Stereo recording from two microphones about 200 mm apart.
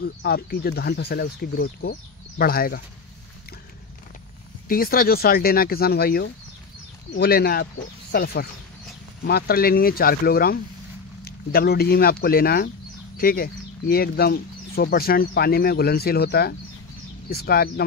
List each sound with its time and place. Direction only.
0.0 s speech: 50° left (ahead or behind)
4.6 s speech: 45° left (ahead or behind)